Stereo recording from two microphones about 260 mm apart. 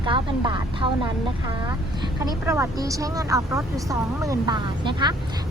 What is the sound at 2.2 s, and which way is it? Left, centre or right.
Speech, centre.